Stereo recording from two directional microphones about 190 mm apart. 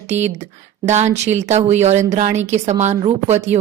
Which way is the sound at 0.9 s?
35° right (ahead or behind).